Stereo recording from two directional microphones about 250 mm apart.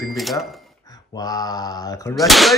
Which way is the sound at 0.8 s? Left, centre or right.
Centre.